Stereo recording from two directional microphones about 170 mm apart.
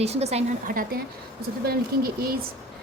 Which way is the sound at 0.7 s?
55° right (ahead or behind).